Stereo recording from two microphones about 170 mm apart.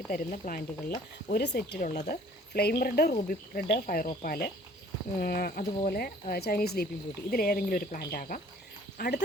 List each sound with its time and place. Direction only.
0.1 s speech: 50° left (ahead or behind)
1.3 s speech: 75° left (ahead or behind)